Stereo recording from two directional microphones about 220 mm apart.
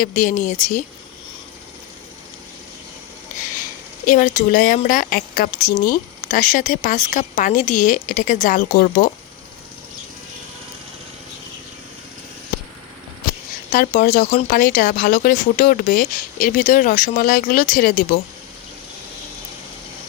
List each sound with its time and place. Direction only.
0.0 s speech: 35° left (ahead or behind)
4.0 s speech: 35° left (ahead or behind)
13.7 s speech: 40° left (ahead or behind)